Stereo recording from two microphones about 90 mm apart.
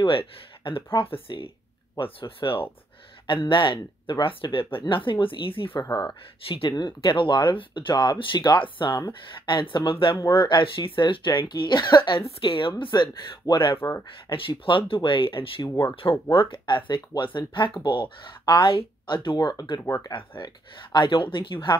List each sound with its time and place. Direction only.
0.0 s speech: 75° left (ahead or behind)
6.8 s speech: 60° left (ahead or behind)
12.3 s speech: 80° left; by 13.7 s 60° left (ahead or behind)
13.7 s speech: 30° left (ahead or behind)
14.3 s speech: 75° left (ahead or behind)